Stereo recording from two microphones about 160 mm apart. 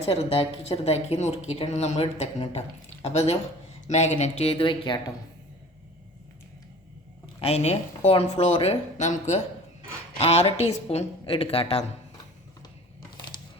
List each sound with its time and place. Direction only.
0.0 s speech: 40° left (ahead or behind)
7.3 s speech: 40° left (ahead or behind)